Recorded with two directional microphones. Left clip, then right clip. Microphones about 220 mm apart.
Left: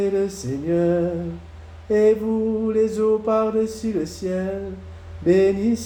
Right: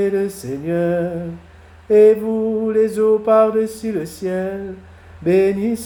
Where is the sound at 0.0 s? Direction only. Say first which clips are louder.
Right 3 dB; 30° right (ahead or behind).